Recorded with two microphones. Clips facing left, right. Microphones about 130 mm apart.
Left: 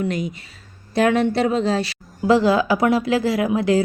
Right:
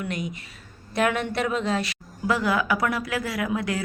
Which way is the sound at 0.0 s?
30° left (ahead or behind).